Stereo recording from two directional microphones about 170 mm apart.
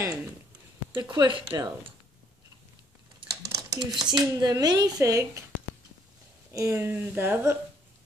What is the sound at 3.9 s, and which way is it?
Speech, 25° right (ahead or behind).